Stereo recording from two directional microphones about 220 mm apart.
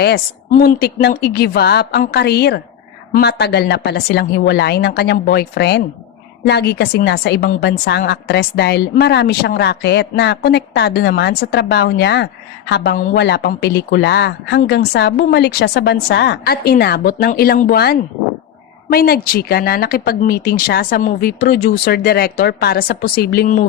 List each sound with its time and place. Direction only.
0.0 s a woman's voice: 45° left (ahead or behind)